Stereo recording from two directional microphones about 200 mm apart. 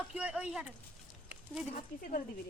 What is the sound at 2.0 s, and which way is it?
Speech, 45° left (ahead or behind).